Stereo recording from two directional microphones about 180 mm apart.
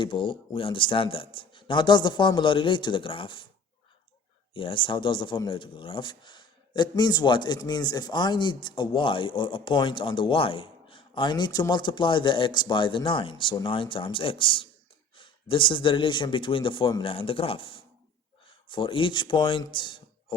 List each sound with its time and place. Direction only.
0.0 s speech: 30° left (ahead or behind)
4.5 s speech: 30° left (ahead or behind)